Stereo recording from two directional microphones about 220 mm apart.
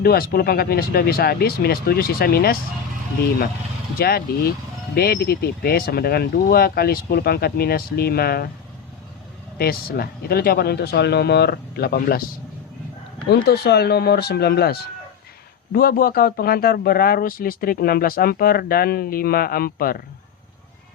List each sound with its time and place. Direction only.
0.0 s speech: 45° left (ahead or behind)
3.9 s speech: 45° left (ahead or behind)
9.6 s speech: 45° left (ahead or behind)
13.3 s speech: 50° left (ahead or behind)